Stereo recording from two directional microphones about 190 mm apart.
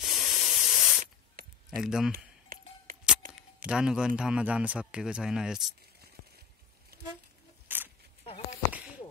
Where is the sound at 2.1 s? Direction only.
50° right (ahead or behind).